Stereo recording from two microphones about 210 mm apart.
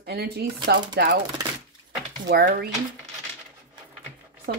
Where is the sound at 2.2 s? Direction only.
50° right (ahead or behind).